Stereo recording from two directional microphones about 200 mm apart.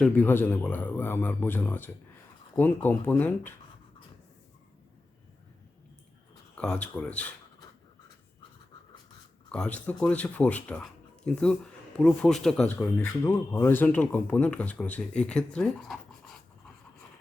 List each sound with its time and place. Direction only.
0.0 s speech: 10° left (ahead or behind)
6.6 s speech: 5° left (ahead or behind)
9.5 s speech: 5° left (ahead or behind)